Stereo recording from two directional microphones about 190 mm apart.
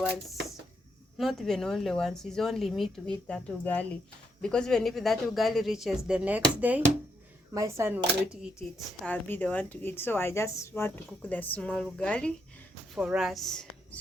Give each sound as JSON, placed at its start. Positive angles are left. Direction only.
{"t": 1.2, "sound": "speech", "side_deg": 0}
{"t": 9.0, "sound": "a woman's voice", "side_deg": 10}